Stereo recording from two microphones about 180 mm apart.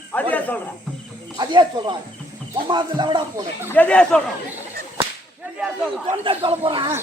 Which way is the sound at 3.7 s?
10° left (ahead or behind).